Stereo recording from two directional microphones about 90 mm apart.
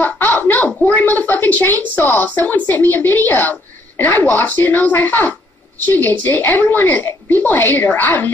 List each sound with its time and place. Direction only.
0.0 s a woman's voice: 20° left (ahead or behind)